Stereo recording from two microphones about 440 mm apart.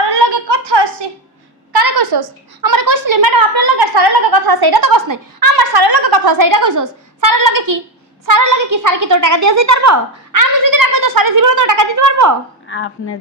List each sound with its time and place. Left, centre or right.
0.1 s a sound: right
1.7 s a woman's voice: right
12.6 s speech: left